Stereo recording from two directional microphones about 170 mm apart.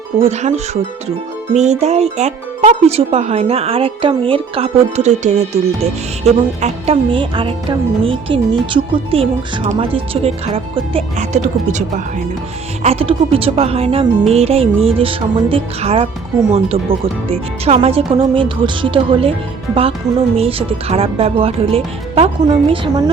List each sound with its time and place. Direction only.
0.2 s speech: 40° right (ahead or behind)
12.8 s speech: 35° right (ahead or behind)
20.3 s speech: 35° right (ahead or behind)